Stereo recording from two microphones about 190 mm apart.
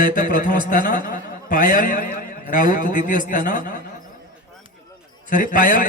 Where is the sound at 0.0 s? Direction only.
45° left (ahead or behind).